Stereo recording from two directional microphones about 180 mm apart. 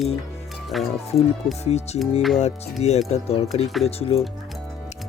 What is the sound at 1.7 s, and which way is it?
Music, 35° left (ahead or behind).